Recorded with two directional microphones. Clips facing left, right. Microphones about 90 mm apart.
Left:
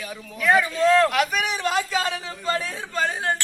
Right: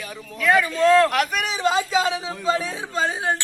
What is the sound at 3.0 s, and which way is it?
Speech, 10° right (ahead or behind).